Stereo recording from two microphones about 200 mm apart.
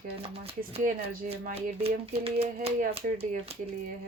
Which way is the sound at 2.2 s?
30° right (ahead or behind).